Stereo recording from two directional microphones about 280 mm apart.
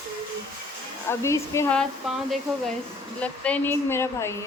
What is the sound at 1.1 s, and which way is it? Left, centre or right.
Speech, centre.